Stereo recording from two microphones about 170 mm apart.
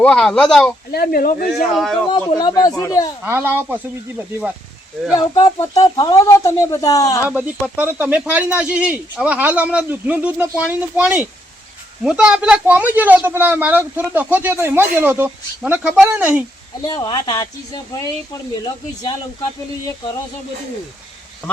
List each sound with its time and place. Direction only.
0.0 s speech: 5° left (ahead or behind)
0.9 s speech: 60° left (ahead or behind)
1.6 s speech: centre (ahead or behind)
2.0 s speech: 25° left (ahead or behind)
3.2 s speech: 15° right (ahead or behind)
5.1 s speech: 20° left (ahead or behind)
7.3 s speech: 10° right (ahead or behind)
16.8 s speech: 20° left (ahead or behind)